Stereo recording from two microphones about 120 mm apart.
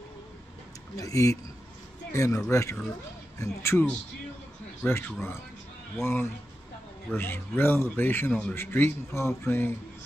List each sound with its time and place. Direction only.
0.9 s speech: 25° left (ahead or behind)
4.8 s speech: 20° left (ahead or behind)